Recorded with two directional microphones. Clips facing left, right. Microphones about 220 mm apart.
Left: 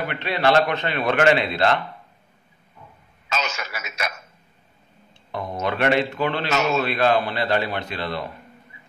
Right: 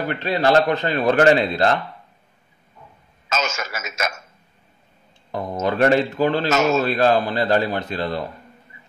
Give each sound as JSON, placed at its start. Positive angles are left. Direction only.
{"t": 0.0, "sound": "speech", "side_deg": -40}
{"t": 3.3, "sound": "speech", "side_deg": -45}
{"t": 5.3, "sound": "speech", "side_deg": -45}